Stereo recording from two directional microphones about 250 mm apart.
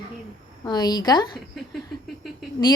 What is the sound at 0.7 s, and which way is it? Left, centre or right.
Speech, centre.